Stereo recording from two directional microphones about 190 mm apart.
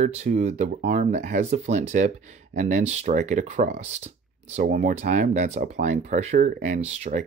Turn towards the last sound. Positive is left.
turn(degrees=-40)  # may be behind; listen again after turning